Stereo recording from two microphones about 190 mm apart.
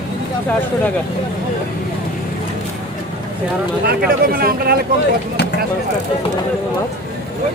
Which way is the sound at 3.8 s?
55° right (ahead or behind).